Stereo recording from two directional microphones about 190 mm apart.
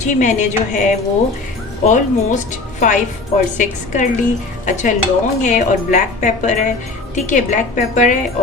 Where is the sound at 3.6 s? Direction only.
40° left (ahead or behind).